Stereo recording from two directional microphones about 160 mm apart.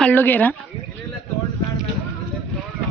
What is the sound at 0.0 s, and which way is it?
Speech, 10° left (ahead or behind).